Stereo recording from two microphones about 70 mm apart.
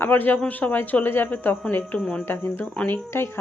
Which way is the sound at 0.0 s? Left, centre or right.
Left.